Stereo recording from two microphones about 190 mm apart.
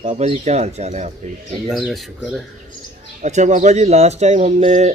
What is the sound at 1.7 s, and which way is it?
Speech, 5° right (ahead or behind).